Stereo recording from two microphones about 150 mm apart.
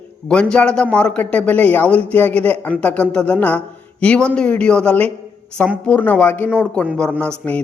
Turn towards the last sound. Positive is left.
turn(degrees=10)  # may be behind; listen again after turning